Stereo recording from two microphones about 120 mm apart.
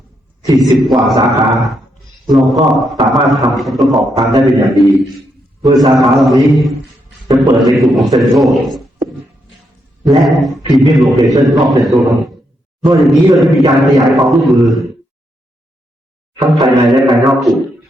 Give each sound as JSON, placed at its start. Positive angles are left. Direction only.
{"t": 0.4, "sound": "a man's voice", "side_deg": -30}
{"t": 0.8, "sound": "a man's voice", "side_deg": 0}
{"t": 10.1, "sound": "a man's voice", "side_deg": 0}
{"t": 16.6, "sound": "a man's voice", "side_deg": 0}